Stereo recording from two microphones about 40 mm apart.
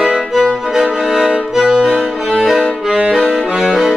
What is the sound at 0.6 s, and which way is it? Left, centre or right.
Music, centre.